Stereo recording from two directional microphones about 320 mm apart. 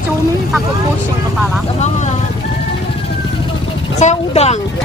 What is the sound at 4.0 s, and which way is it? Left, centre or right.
Speech, left.